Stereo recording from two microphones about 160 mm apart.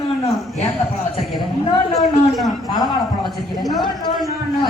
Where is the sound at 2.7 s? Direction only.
25° left (ahead or behind).